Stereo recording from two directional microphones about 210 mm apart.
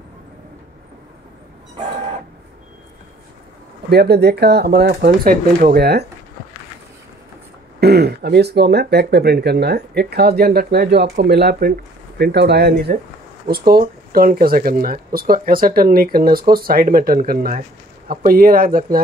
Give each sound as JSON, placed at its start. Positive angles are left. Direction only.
{"t": 3.9, "sound": "speech", "side_deg": -50}
{"t": 7.8, "sound": "speech", "side_deg": -50}